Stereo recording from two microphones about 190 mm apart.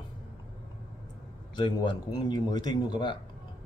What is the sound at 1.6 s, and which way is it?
Speech, 25° left (ahead or behind).